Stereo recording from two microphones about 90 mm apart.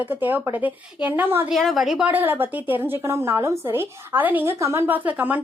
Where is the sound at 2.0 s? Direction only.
20° right (ahead or behind).